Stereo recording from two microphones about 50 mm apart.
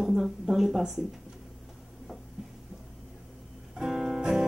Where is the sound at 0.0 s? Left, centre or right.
Centre.